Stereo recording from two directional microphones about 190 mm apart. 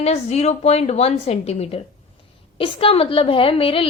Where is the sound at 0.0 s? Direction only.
35° left (ahead or behind).